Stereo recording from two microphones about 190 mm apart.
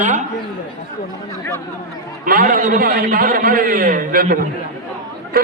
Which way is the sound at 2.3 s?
50° right (ahead or behind).